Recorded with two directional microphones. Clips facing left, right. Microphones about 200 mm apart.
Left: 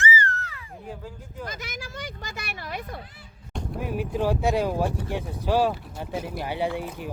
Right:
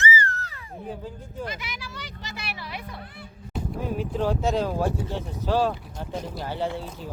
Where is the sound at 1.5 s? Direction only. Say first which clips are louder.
Even; 45° left (ahead or behind).